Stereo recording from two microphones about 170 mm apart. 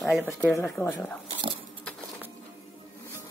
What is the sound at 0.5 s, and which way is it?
Speech, 20° left (ahead or behind).